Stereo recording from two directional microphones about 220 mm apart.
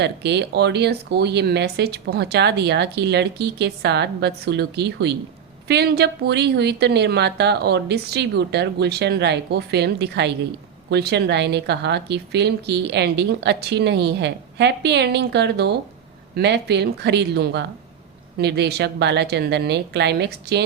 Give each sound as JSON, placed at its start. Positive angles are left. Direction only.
{"t": 0.0, "sound": "speech", "side_deg": -50}